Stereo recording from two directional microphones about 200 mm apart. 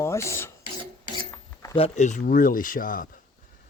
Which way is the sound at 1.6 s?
25° left (ahead or behind).